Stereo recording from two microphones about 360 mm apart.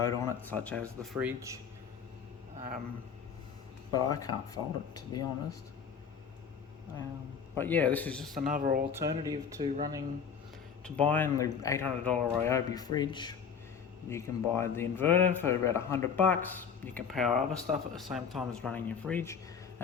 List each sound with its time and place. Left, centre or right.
0.0 s speech: centre
3.9 s speech: centre
7.6 s speech: centre
8.4 s speech: right
8.9 s speech: centre
10.8 s speech: centre